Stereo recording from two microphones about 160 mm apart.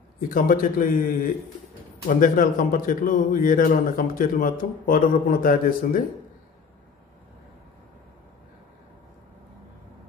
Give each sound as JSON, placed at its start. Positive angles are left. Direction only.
{"t": 0.3, "sound": "a man's voice", "side_deg": 60}